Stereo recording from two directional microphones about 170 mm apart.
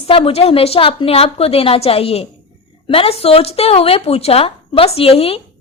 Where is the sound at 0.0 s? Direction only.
35° left (ahead or behind).